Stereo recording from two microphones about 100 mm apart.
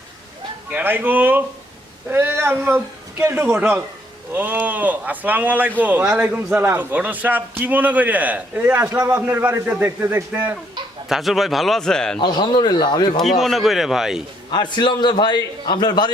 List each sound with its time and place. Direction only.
0.7 s speech: 20° right (ahead or behind)
11.1 s a man's voice: centre (ahead or behind)
12.2 s a man's voice: 45° left (ahead or behind)
13.1 s a man's voice: centre (ahead or behind)
14.5 s a man's voice: 50° left (ahead or behind)